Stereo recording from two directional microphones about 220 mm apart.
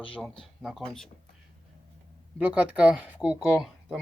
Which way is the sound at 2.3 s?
5° right (ahead or behind).